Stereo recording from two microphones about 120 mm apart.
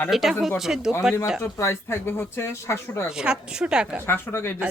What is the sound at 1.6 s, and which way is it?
Speech, 20° left (ahead or behind).